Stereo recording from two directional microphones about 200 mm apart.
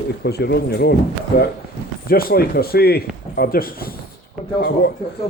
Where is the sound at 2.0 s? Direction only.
50° left (ahead or behind).